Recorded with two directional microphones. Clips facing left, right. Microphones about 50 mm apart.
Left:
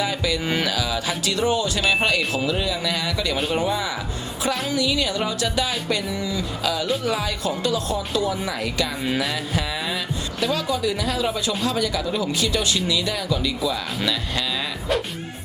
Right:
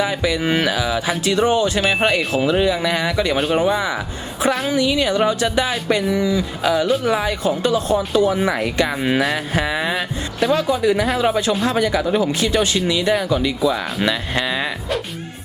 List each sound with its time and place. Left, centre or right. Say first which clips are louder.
0.0 s chime: right 4 dB; right
8.4 s speech: right 7 dB; right